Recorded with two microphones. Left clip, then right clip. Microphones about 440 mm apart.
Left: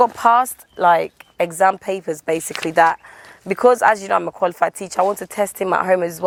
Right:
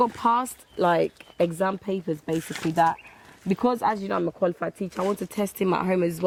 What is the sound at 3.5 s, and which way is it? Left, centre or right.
Speech, left.